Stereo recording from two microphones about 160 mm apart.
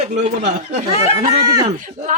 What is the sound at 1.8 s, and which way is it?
Speech, 55° right (ahead or behind).